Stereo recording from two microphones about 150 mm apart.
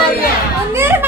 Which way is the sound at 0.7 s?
15° right (ahead or behind).